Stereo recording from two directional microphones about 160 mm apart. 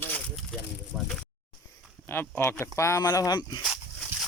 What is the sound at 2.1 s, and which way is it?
Speech, 15° left (ahead or behind).